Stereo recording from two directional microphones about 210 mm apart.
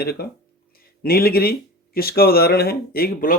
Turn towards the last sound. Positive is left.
turn(degrees=45)  # may be behind; listen again after turning